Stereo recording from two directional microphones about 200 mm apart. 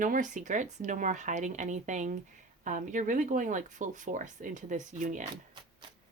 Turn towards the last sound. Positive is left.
turn(degrees=-40)  # may be behind; listen again after turning